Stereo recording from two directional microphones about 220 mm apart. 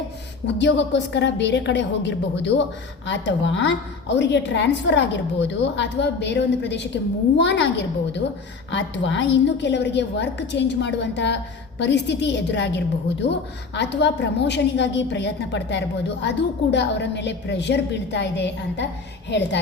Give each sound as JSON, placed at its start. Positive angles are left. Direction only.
{"t": 0.4, "sound": "a woman's voice", "side_deg": 55}